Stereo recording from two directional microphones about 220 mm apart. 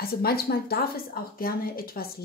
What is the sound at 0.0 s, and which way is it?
A woman's voice, 45° left (ahead or behind).